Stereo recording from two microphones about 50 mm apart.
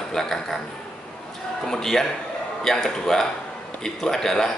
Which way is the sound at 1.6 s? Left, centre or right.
Centre.